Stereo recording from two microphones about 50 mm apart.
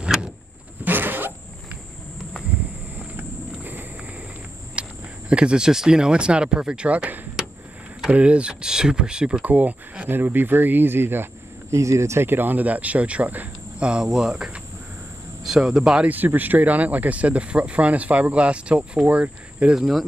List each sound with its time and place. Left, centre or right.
0.0 s vehicle: centre
0.8 s a sound: right
3.2 s walk: right
4.8 s a sound: right
5.3 s speech: centre
8.1 s speech: right
9.4 s speech: right
11.7 s speech: right
12.3 s speech: right
13.7 s speech: centre
14.0 s speech: centre
16.3 s speech: right
19.7 s speech: centre